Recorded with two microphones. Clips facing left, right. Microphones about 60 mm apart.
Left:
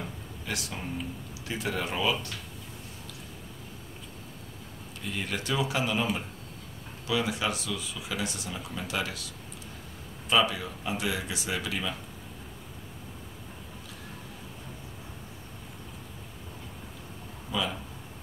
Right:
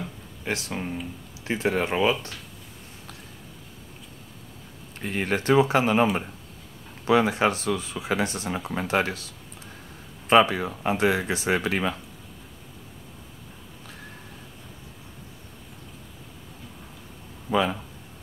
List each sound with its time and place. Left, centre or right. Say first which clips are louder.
0.5 s speech: right 6 dB; right
5.0 s speech: right 9 dB; right
7.1 s speech: right 8 dB; right
10.3 s speech: right 7 dB; right
17.5 s speech: right 8 dB; right